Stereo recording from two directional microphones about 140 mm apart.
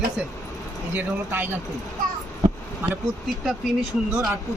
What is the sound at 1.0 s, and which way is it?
Speech, 15° right (ahead or behind).